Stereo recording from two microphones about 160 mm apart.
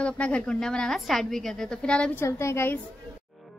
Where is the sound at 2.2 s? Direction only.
15° left (ahead or behind).